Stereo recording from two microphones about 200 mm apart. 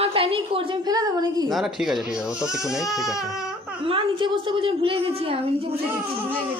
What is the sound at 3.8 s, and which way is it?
A woman's voice, 25° right (ahead or behind).